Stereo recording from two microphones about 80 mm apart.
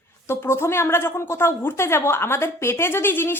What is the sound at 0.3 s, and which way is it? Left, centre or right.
A woman's voice, left.